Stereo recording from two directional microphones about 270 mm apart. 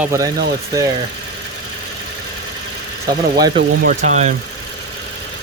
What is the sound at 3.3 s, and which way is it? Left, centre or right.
Speech, centre.